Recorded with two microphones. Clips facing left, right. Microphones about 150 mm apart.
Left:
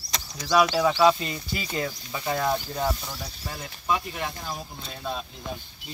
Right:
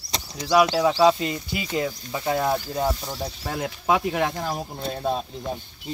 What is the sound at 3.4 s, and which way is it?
Speech, 70° right (ahead or behind).